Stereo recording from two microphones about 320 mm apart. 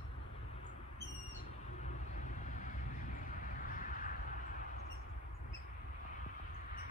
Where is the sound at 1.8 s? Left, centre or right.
Left.